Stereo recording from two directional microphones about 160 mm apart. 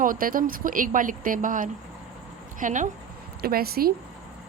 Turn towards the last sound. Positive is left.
turn(degrees=-70)  # may be behind; listen again after turning